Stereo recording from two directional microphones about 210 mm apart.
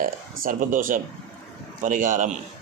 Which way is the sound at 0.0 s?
40° right (ahead or behind).